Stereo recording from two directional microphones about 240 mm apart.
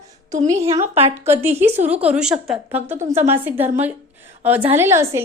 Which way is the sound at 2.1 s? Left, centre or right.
Centre.